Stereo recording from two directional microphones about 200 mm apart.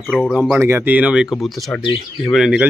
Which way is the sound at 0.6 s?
10° right (ahead or behind).